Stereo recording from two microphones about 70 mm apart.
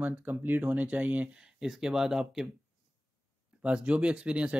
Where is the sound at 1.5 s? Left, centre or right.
Centre.